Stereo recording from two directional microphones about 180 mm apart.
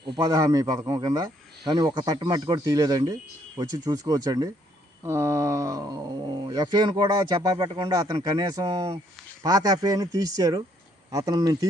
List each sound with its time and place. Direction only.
0.0 s speech: 20° right (ahead or behind)